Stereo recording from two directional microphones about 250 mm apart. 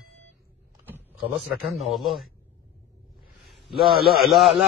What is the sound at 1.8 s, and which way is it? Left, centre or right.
Speech, centre.